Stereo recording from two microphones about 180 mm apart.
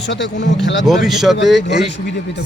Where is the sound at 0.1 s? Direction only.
80° left.